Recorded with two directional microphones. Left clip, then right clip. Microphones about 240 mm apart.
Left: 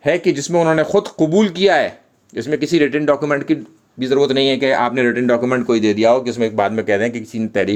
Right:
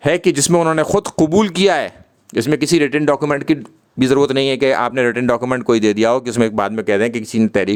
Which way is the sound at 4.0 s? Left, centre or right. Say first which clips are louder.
Right 1 dB; right.